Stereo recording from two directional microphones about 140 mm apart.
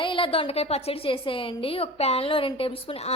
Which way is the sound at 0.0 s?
35° left (ahead or behind).